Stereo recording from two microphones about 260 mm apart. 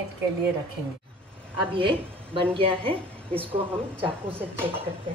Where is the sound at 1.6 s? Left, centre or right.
Centre.